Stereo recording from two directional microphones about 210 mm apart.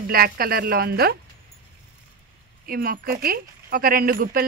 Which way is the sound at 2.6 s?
45° right (ahead or behind).